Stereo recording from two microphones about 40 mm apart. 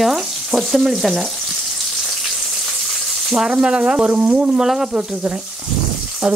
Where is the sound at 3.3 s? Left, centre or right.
Centre.